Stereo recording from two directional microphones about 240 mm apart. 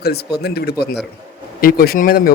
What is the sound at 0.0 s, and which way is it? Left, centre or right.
A man's voice, left.